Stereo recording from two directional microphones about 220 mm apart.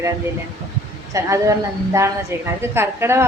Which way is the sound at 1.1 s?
15° right (ahead or behind).